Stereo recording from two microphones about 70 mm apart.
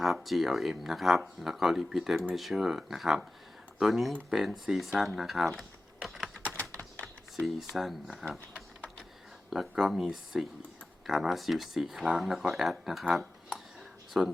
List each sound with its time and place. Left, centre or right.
0.0 s speech: centre
6.4 s typing: left
7.0 s speech: centre
9.5 s speech: centre
14.2 s speech: centre